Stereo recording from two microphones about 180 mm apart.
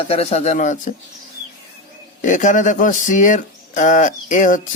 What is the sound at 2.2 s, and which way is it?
Speech, 45° left (ahead or behind).